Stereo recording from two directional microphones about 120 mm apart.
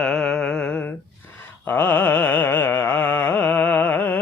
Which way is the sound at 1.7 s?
20° left (ahead or behind).